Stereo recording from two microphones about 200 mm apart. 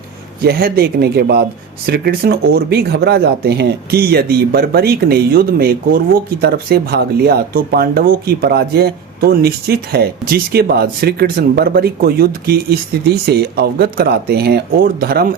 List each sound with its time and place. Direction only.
0.4 s speech: 50° right (ahead or behind)